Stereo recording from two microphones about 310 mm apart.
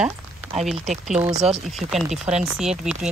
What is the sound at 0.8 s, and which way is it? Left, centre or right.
Speech, right.